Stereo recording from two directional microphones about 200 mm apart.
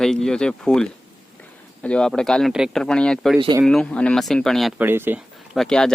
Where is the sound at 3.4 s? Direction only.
20° right (ahead or behind).